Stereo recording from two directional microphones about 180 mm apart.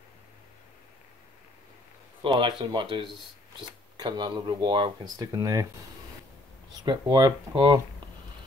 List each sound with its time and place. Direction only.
2.2 s speech: 25° right (ahead or behind)
6.8 s speech: 25° right (ahead or behind)